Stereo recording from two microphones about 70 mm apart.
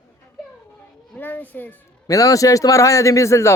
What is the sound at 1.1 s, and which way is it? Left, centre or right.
Children playing, left.